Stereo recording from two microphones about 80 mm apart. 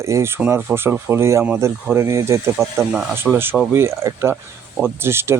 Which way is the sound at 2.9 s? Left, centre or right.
Centre.